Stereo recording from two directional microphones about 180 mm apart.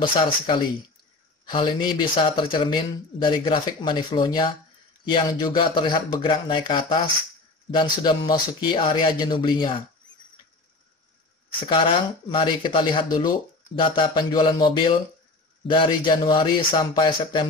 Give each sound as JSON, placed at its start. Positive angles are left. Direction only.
{"t": 0.0, "sound": "speech", "side_deg": 25}
{"t": 11.7, "sound": "speech", "side_deg": 30}